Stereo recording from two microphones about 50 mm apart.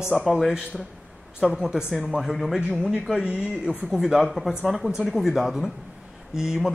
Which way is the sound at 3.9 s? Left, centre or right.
Centre.